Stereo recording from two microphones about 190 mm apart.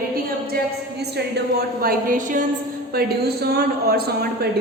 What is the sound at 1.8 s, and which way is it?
Speech, 45° right (ahead or behind).